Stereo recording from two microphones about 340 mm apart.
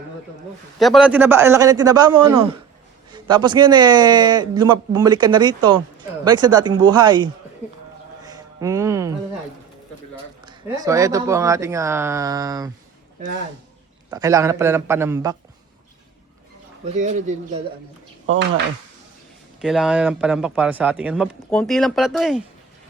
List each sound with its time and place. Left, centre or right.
0.8 s speech: centre
8.2 s music: centre
10.4 s speech: centre
14.1 s speech: centre
16.9 s speech: right
19.6 s speech: centre